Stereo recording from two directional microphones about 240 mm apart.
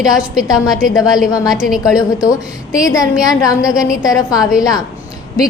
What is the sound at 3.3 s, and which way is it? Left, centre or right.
A woman's voice, centre.